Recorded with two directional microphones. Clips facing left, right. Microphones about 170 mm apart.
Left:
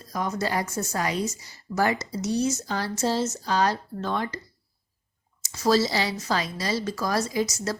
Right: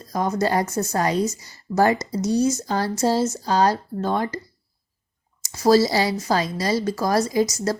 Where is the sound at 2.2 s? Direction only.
15° right (ahead or behind).